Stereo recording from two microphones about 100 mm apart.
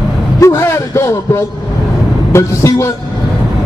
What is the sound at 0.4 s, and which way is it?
A man's voice, 30° left (ahead or behind).